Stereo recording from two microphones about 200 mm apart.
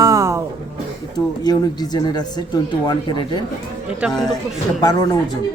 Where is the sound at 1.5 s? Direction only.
20° left (ahead or behind).